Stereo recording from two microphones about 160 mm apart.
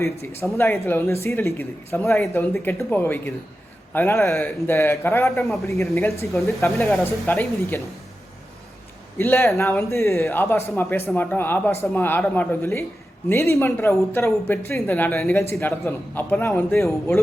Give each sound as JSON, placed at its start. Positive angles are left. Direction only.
{"t": 0.0, "sound": "speech", "side_deg": 15}
{"t": 9.1, "sound": "speech", "side_deg": 15}